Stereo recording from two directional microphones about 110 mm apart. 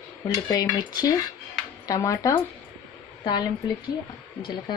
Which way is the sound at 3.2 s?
40° left (ahead or behind).